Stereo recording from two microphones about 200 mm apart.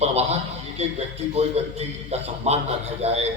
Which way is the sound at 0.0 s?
30° right (ahead or behind).